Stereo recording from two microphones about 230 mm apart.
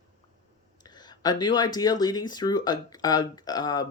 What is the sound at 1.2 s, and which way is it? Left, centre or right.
Speech, centre.